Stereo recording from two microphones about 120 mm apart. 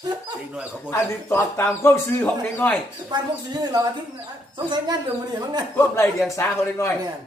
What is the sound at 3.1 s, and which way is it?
Speech, 35° right (ahead or behind).